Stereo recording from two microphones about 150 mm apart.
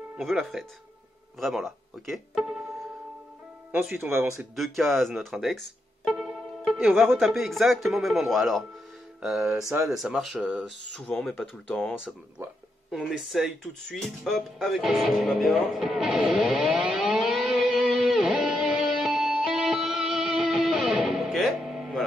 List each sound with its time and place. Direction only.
0.2 s speech: centre (ahead or behind)
3.8 s speech: 15° right (ahead or behind)
4.6 s speech: centre (ahead or behind)
12.9 s music: centre (ahead or behind)